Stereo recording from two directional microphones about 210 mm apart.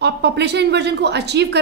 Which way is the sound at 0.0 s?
55° right (ahead or behind).